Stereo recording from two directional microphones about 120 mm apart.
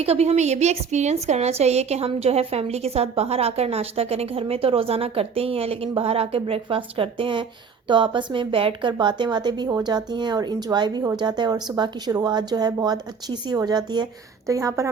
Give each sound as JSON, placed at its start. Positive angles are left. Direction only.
{"t": 0.0, "sound": "a woman's voice", "side_deg": -60}